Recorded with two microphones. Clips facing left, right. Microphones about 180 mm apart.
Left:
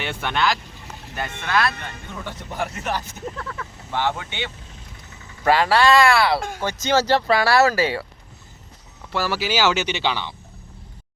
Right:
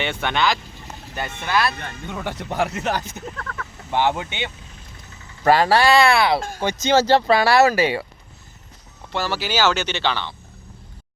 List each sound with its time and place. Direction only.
0.0 s speech: centre (ahead or behind)
2.0 s speech: 70° right (ahead or behind)
3.9 s speech: 20° right (ahead or behind)
5.5 s speech: 40° right (ahead or behind)
5.9 s speech: 25° right (ahead or behind)
9.2 s speech: 5° left (ahead or behind)